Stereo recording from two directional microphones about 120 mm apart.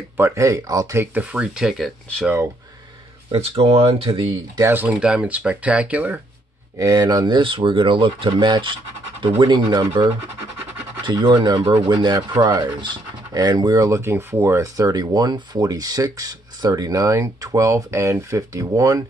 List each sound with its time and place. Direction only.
0.2 s speech: 25° right (ahead or behind)
1.1 s speech: 10° right (ahead or behind)
3.3 s speech: 55° right (ahead or behind)
4.6 s speech: 20° right (ahead or behind)
4.8 s speech: 10° right (ahead or behind)
6.8 s speech: 30° right (ahead or behind)